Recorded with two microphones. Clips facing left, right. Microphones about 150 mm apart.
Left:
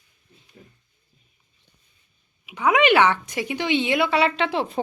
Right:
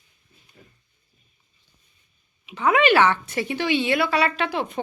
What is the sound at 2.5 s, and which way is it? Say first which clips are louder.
A woman's voice: even; 10° left (ahead or behind).